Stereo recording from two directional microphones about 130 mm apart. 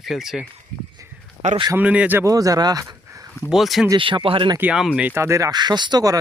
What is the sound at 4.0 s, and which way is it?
Speech, 40° right (ahead or behind).